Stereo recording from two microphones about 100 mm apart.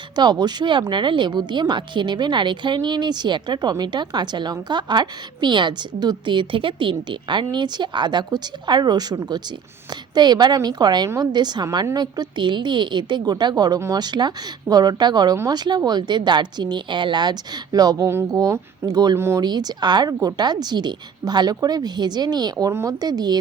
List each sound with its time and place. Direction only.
0.2 s a woman's voice: 45° right (ahead or behind)
13.7 s speech: 30° right (ahead or behind)
14.0 s a woman's voice: 45° right (ahead or behind)
19.1 s speech: 25° right (ahead or behind)
19.4 s a woman's voice: 45° right (ahead or behind)